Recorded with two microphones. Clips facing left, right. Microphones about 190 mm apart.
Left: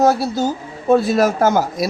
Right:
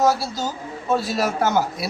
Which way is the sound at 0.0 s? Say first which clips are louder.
Left 5 dB; 55° left (ahead or behind).